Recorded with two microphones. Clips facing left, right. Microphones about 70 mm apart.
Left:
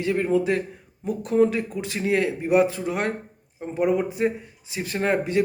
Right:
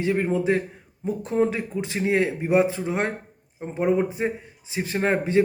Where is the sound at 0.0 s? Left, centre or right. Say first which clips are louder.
Left 1 dB; right.